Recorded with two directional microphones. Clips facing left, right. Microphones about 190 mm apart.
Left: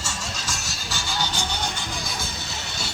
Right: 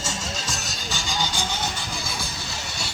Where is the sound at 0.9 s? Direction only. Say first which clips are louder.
Even; 15° right (ahead or behind).